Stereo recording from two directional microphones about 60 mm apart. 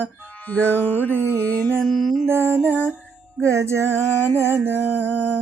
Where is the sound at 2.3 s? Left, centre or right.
Right.